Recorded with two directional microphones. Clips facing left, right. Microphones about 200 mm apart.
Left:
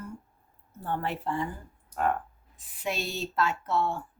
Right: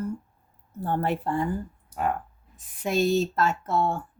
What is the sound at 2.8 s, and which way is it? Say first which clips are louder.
Speech: right 10 dB; 45° right (ahead or behind).